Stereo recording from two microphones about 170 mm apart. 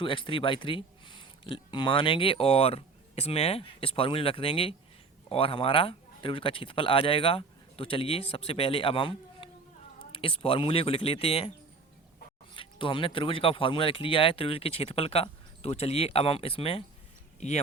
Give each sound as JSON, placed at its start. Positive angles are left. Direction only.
{"t": 0.0, "sound": "speech", "side_deg": 30}
{"t": 12.5, "sound": "speech", "side_deg": 30}